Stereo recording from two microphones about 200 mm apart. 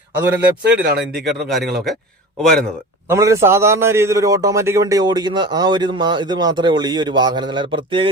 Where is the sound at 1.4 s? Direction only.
Centre (ahead or behind).